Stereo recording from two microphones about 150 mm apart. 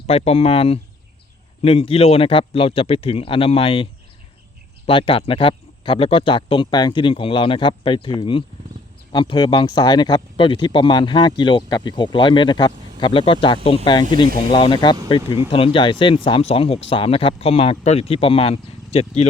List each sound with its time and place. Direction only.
0.1 s speech: 45° left (ahead or behind)
4.9 s speech: 35° left (ahead or behind)